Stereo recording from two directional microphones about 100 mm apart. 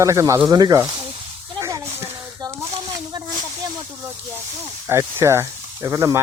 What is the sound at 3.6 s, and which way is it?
Snake, 40° right (ahead or behind).